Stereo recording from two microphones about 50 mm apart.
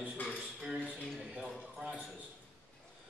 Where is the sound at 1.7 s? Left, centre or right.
Right.